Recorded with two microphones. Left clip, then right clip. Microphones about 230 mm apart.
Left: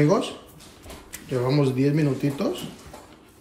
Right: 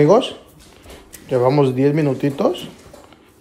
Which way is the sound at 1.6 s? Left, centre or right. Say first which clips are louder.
Right 7 dB; centre.